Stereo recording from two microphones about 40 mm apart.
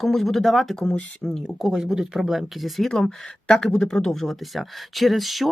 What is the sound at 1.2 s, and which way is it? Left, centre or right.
Speech, centre.